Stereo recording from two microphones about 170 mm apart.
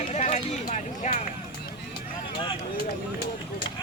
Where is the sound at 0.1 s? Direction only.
40° left (ahead or behind).